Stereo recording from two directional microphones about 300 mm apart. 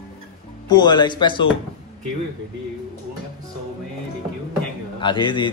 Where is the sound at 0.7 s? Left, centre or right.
Centre.